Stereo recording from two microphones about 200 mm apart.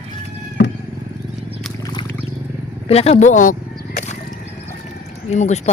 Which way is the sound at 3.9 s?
35° left (ahead or behind).